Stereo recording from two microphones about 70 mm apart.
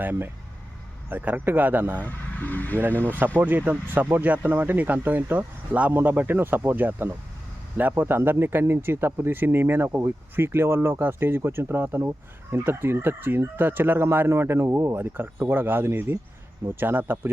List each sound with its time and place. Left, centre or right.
0.0 s speech: right
2.0 s speech: left
3.1 s speech: right